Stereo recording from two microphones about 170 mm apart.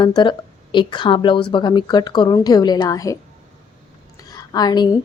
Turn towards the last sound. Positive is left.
turn(degrees=25)  # may be behind; listen again after turning